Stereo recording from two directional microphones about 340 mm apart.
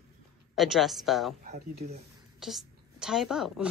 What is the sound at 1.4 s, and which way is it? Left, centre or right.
Speech, right.